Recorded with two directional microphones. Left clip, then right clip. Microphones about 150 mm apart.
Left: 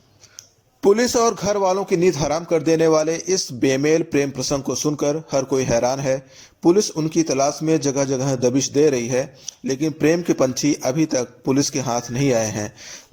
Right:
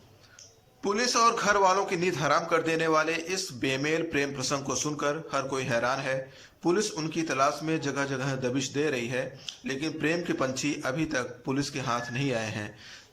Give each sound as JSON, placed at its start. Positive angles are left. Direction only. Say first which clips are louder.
{"t": 0.8, "sound": "a man's voice", "louder": "left 9 dB", "side_deg": 50}